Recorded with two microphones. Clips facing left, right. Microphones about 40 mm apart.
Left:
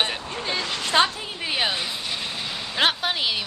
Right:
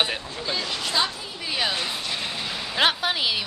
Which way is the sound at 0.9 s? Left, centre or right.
Left.